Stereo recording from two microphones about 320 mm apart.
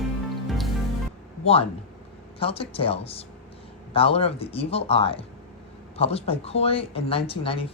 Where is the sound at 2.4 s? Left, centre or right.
Centre.